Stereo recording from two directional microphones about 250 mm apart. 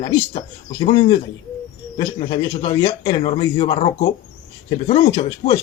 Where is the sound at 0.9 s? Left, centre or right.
Centre.